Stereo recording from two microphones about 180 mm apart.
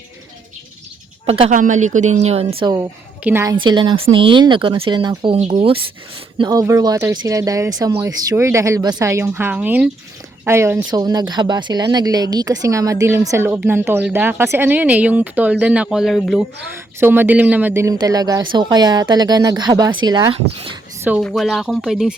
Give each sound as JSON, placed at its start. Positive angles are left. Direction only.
{"t": 1.3, "sound": "a woman's voice", "side_deg": -35}
{"t": 1.5, "sound": "a woman's voice", "side_deg": -45}
{"t": 3.2, "sound": "speech", "side_deg": -10}
{"t": 3.6, "sound": "speech", "side_deg": -25}
{"t": 6.4, "sound": "speech", "side_deg": -20}
{"t": 17.0, "sound": "speech", "side_deg": -10}
{"t": 21.2, "sound": "speech", "side_deg": 0}